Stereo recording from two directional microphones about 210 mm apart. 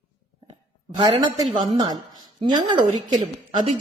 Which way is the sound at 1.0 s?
20° right (ahead or behind).